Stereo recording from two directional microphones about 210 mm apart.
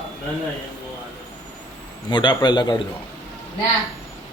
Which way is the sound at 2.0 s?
20° left (ahead or behind).